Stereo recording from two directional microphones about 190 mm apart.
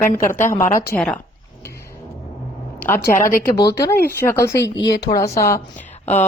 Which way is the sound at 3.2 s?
45° left (ahead or behind).